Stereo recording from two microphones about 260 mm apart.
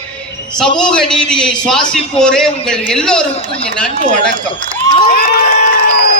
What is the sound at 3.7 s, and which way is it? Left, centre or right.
Speech, centre.